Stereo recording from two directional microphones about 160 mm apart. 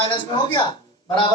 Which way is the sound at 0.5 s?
30° left (ahead or behind).